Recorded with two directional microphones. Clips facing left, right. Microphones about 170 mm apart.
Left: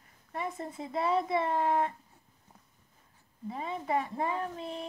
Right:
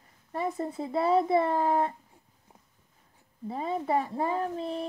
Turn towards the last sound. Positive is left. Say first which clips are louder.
# right 5 dB
turn(degrees=-35)  # may be behind; listen again after turning